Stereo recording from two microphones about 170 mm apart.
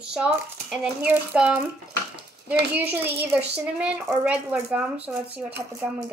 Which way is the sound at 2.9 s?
10° right (ahead or behind).